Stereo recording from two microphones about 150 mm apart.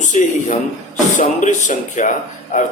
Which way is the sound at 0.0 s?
55° left (ahead or behind).